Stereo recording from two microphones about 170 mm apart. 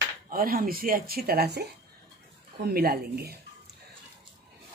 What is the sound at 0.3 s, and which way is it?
Speech, 60° right (ahead or behind).